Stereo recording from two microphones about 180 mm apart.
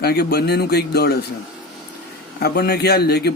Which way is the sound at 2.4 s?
60° left (ahead or behind).